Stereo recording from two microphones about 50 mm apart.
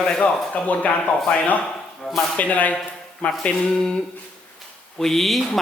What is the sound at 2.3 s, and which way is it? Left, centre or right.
Speech, left.